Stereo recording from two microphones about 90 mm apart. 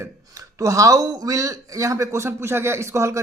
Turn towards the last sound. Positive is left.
turn(degrees=-35)  # may be behind; listen again after turning